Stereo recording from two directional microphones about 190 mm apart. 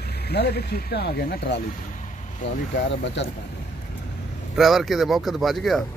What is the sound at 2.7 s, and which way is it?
Speech, 70° left (ahead or behind).